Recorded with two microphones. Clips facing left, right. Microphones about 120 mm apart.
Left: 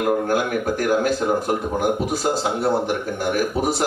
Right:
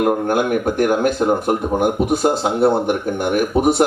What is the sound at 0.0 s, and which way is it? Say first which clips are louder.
Speech: right 3 dB; 25° right (ahead or behind).